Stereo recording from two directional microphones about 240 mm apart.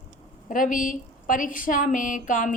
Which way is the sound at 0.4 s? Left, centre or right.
Left.